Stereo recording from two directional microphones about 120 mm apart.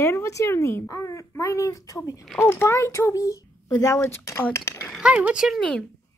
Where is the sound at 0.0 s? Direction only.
20° left (ahead or behind).